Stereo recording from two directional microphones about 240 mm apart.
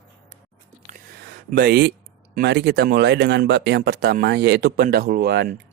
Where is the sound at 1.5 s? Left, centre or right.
Right.